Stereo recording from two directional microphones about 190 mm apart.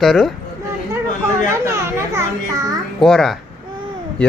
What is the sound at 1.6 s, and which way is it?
Children playing, 15° right (ahead or behind).